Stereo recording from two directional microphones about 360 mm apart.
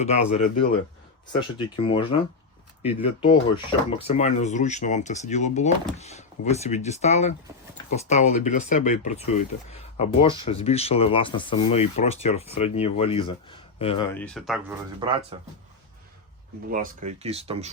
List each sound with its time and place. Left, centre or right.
0.0 s speech: centre
15.0 s speech: centre
16.7 s speech: right